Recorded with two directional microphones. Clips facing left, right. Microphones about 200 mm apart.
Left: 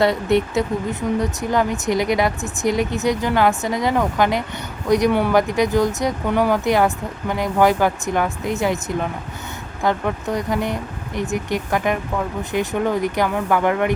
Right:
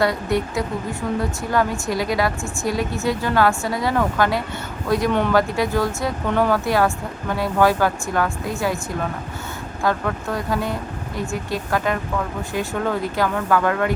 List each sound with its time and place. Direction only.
0.0 s speech: 25° left (ahead or behind)
9.8 s speech: 20° left (ahead or behind)